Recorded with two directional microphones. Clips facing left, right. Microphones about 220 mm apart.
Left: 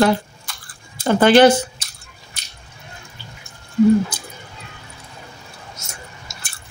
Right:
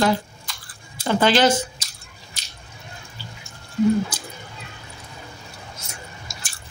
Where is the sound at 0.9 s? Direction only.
50° left (ahead or behind).